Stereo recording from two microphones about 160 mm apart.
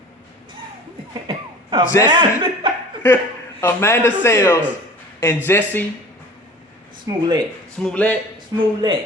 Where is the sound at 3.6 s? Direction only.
15° left (ahead or behind).